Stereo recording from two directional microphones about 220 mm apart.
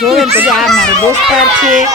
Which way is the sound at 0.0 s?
Centre (ahead or behind).